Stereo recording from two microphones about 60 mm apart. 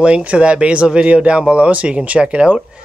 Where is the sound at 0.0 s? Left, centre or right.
Centre.